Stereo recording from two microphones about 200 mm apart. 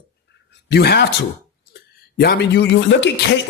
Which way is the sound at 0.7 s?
55° left (ahead or behind).